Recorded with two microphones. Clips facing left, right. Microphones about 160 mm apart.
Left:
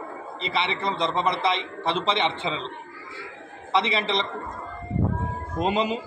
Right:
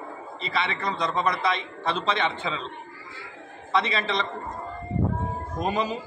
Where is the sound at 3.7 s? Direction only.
25° left (ahead or behind).